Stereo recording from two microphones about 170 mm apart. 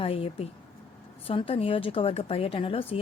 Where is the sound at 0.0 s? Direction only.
35° left (ahead or behind).